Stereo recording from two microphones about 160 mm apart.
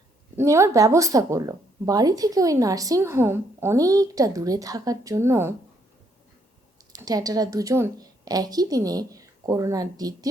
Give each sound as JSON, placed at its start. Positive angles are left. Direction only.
{"t": 0.3, "sound": "speech", "side_deg": -15}
{"t": 6.9, "sound": "a woman's voice", "side_deg": -25}